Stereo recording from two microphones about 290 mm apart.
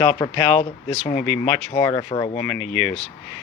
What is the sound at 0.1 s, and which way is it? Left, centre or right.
Speech, left.